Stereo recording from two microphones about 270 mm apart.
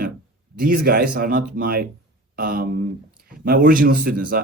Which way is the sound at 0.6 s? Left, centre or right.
Right.